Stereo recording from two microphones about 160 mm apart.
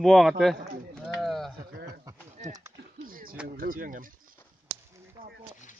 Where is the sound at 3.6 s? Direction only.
60° right (ahead or behind).